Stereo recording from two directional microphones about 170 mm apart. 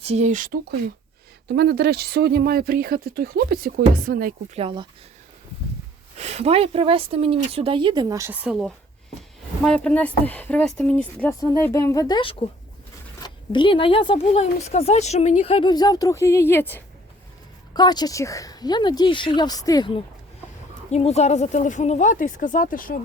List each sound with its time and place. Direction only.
0.0 s speech: 40° right (ahead or behind); by 0.8 s 55° right (ahead or behind)
1.5 s speech: 70° right (ahead or behind)
4.5 s speech: 30° right (ahead or behind)
6.1 s speech: 40° right (ahead or behind); by 8.3 s 20° right (ahead or behind)
8.3 s a woman's voice: 5° right (ahead or behind); by 16.8 s 10° left (ahead or behind)
17.7 s speech: 25° left (ahead or behind)
20.9 s speech: 40° left (ahead or behind)